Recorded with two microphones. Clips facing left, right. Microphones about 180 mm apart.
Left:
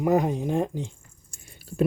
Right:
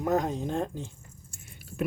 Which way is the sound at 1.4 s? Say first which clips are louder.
Left 7 dB; 35° left (ahead or behind).